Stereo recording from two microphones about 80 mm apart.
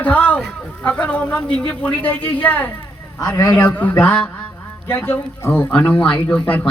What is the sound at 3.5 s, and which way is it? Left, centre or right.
A woman's voice, left.